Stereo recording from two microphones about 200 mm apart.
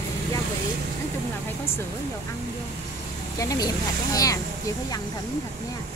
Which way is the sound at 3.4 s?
20° left (ahead or behind).